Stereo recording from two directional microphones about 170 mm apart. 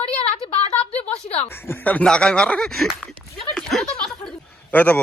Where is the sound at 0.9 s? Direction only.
10° left (ahead or behind).